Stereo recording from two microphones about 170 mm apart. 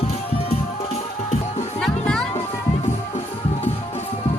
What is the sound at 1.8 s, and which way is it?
Music, 5° left (ahead or behind).